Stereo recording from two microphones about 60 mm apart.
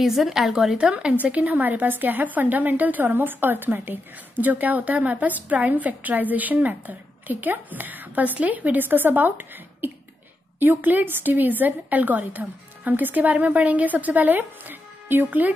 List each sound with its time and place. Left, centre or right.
0.0 s a woman's voice: centre
0.7 s a woman's voice: centre